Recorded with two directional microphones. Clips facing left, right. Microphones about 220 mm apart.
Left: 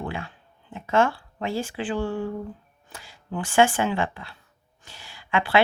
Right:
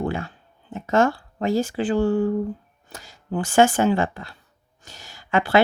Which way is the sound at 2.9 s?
40° right (ahead or behind).